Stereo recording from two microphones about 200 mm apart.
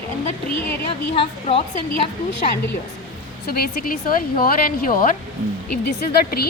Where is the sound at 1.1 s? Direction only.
30° left (ahead or behind).